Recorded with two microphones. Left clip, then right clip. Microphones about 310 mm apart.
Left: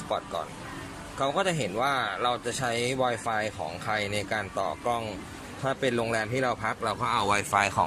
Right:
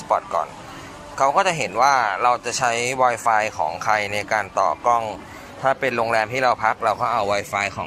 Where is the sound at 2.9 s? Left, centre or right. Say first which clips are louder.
Right 9 dB; right.